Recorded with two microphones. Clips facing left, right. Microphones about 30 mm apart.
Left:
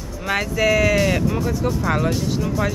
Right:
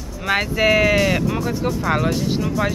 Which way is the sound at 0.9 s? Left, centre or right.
Centre.